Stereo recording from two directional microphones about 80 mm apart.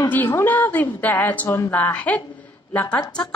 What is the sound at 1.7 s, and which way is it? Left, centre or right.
Speech, centre.